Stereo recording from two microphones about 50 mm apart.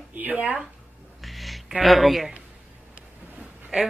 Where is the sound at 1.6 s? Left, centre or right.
Centre.